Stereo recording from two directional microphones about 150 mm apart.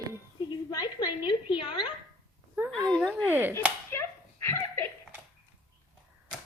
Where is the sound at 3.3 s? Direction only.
10° right (ahead or behind).